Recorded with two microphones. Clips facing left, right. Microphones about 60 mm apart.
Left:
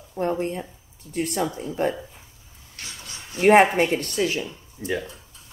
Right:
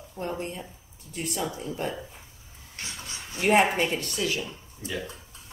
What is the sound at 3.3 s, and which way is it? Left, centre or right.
Speech, left.